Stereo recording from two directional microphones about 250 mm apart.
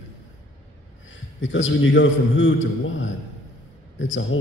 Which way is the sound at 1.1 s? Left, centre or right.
Left.